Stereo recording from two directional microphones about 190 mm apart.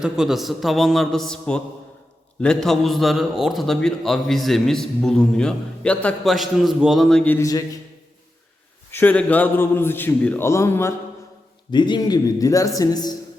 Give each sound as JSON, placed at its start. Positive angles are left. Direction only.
{"t": 0.0, "sound": "a man's voice", "side_deg": 0}
{"t": 8.9, "sound": "a man's voice", "side_deg": 10}